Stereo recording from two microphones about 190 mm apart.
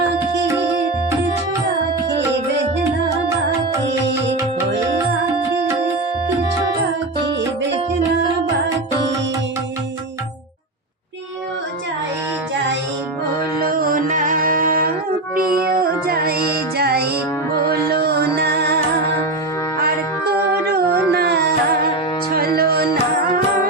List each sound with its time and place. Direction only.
13.6 s music: 50° right (ahead or behind)
20.7 s music: 55° right (ahead or behind)